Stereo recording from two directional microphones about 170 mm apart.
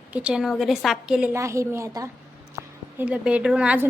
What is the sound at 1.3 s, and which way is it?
Speech, 15° right (ahead or behind).